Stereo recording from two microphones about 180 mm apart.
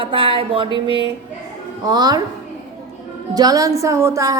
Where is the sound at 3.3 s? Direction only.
20° right (ahead or behind).